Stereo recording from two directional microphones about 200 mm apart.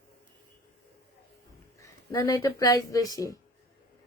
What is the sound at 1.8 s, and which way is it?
Speech, 15° left (ahead or behind).